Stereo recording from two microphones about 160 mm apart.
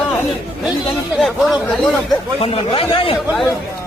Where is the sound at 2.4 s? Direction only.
35° left (ahead or behind).